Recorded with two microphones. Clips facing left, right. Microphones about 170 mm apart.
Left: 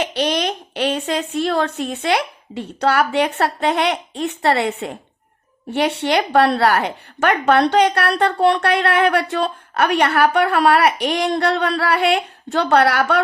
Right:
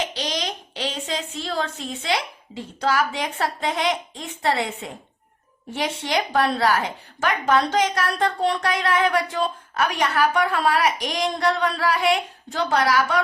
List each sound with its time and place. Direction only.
0.0 s a woman's voice: 60° left (ahead or behind)